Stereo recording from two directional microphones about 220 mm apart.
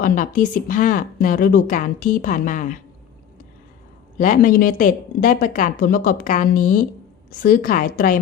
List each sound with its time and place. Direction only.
0.0 s a woman's voice: 35° left (ahead or behind)
4.2 s a woman's voice: 35° left (ahead or behind)